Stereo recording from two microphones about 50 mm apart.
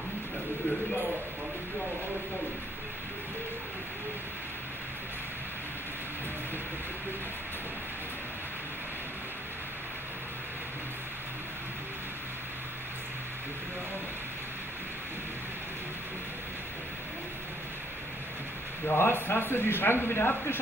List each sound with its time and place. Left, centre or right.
18.9 s speech: left